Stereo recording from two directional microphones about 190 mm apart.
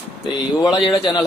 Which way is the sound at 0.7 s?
20° left (ahead or behind).